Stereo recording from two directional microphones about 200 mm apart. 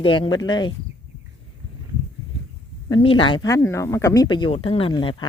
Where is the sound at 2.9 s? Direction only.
25° left (ahead or behind).